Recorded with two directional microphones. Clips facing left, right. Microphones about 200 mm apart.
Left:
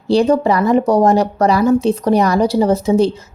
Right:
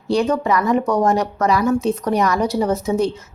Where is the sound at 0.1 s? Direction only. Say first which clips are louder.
Left 5 dB; 30° left (ahead or behind).